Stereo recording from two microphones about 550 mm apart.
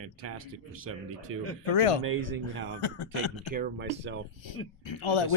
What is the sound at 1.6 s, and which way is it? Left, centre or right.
Speech, left.